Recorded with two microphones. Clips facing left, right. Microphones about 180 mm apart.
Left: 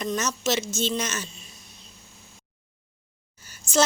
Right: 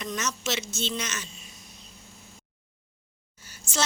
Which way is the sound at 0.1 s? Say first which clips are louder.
Left 5 dB; 40° left (ahead or behind).